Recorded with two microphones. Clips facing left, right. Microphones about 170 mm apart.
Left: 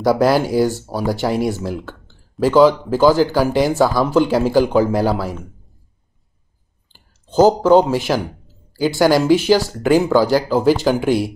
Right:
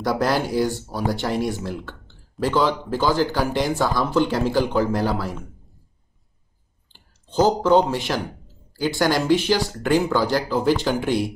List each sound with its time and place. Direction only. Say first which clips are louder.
0.0 s speech: left 7 dB; 10° left (ahead or behind)
7.2 s speech: left 6 dB; 45° left (ahead or behind)
7.6 s speech: left 5 dB; 10° left (ahead or behind)